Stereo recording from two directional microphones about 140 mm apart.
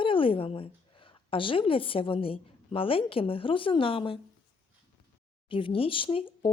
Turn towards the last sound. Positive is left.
turn(degrees=40)  # may be behind; listen again after turning